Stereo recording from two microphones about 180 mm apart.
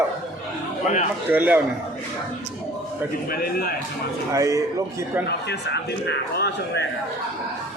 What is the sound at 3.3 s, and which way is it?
Speech, 55° left (ahead or behind).